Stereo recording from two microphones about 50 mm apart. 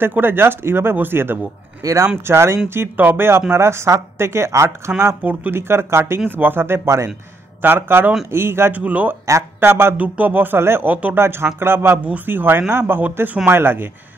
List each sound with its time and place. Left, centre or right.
0.0 s speech: right
2.2 s speech: right
5.2 s speech: right
5.5 s speech: right
6.2 s speech: right
7.6 s speech: right
8.7 s speech: right
9.6 s speech: right
9.9 s speech: right
10.6 s speech: right
10.9 s speech: right
11.1 s speech: right
13.5 s speech: right